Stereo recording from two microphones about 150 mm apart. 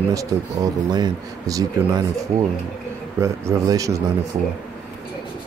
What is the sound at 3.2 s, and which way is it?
Speech, 20° right (ahead or behind).